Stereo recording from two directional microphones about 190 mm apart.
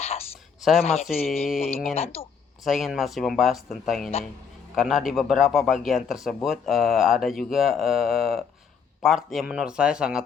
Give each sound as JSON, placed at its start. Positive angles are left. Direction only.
{"t": 0.0, "sound": "a sound", "side_deg": 30}
{"t": 0.6, "sound": "a man's voice", "side_deg": 0}
{"t": 2.1, "sound": "speech", "side_deg": 30}
{"t": 2.6, "sound": "a man's voice", "side_deg": 0}